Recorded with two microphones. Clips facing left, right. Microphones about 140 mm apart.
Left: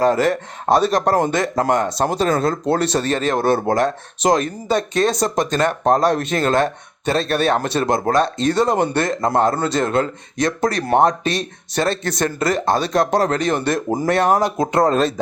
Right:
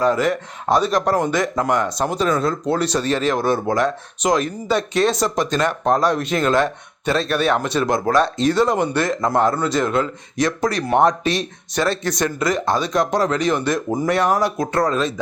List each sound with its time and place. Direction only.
0.2 s speech: 30° left (ahead or behind)
2.8 s speech: 55° left (ahead or behind)
4.4 s speech: 45° left (ahead or behind)
7.2 s speech: 30° left (ahead or behind)
7.9 s speech: 50° left (ahead or behind)
8.6 s speech: 30° left (ahead or behind)
10.0 s speech: 50° left (ahead or behind)
11.7 s speech: 30° left (ahead or behind)
12.0 s speech: 55° left (ahead or behind)
12.4 s speech: 30° left (ahead or behind)
13.1 s speech: 55° left (ahead or behind)
13.7 s speech: 30° left (ahead or behind)